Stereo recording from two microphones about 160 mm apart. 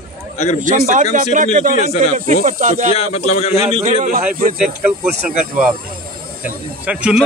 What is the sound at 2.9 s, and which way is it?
Speech, 40° left (ahead or behind).